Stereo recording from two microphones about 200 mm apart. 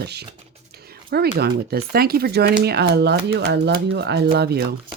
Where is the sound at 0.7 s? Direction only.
50° right (ahead or behind).